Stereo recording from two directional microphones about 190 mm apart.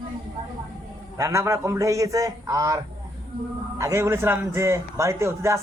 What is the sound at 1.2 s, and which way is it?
A man's voice, 15° right (ahead or behind).